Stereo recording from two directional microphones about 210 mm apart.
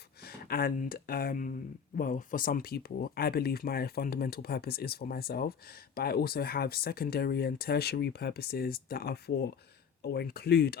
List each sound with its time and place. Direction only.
0.2 s speech: 45° left (ahead or behind)